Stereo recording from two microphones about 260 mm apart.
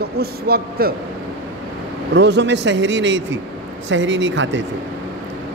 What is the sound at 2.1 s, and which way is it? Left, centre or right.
Speech, right.